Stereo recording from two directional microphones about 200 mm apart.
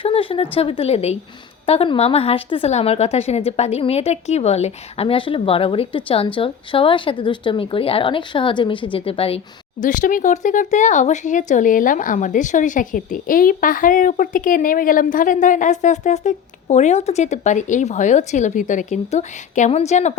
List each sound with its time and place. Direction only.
0.0 s a sound: 25° left (ahead or behind)
0.5 s a woman's voice: 30° left (ahead or behind)
9.8 s speech: 40° left (ahead or behind)